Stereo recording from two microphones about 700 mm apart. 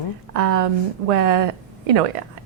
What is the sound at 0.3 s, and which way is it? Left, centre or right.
A woman's voice, right.